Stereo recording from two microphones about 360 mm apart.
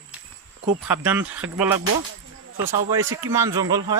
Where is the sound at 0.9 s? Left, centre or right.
Centre.